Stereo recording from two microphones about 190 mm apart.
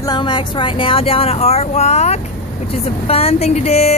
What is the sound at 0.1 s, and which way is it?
A woman's voice, 25° left (ahead or behind).